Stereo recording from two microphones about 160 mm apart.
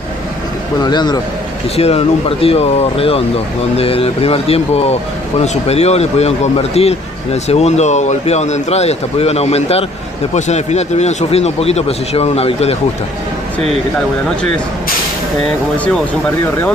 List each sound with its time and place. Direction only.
0.8 s a man's voice: 25° left (ahead or behind)
1.8 s speech: 40° left (ahead or behind)